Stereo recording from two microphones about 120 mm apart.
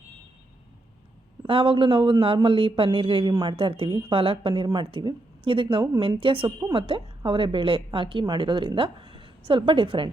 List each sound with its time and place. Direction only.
1.5 s speech: 50° right (ahead or behind)
5.7 s a woman's voice: 35° right (ahead or behind)
6.0 s a woman's voice: 50° right (ahead or behind)